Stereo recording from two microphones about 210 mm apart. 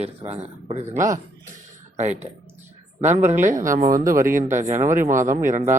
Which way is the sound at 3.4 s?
40° right (ahead or behind).